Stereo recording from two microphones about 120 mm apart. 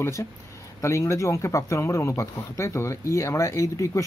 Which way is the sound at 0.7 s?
25° left (ahead or behind).